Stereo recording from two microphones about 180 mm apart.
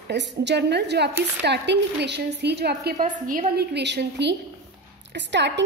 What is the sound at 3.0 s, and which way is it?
Speech, 50° right (ahead or behind).